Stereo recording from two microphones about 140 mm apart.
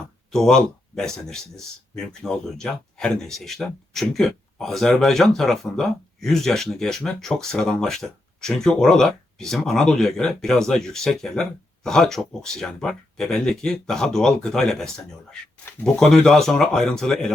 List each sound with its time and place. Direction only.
0.3 s speech: 5° left (ahead or behind)